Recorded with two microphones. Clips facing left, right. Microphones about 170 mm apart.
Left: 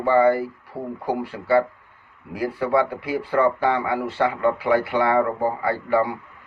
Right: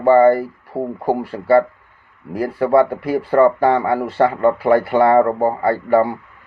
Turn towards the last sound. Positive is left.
turn(degrees=-45)  # may be behind; listen again after turning